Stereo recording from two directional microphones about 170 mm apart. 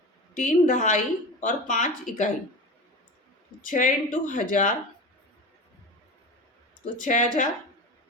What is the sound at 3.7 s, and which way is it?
Speech, 50° left (ahead or behind).